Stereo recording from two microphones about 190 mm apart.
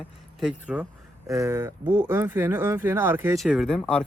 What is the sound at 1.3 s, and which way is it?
Speech, 15° right (ahead or behind).